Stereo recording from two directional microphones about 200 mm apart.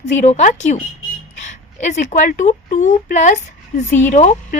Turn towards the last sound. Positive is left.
turn(degrees=35)  # may be behind; listen again after turning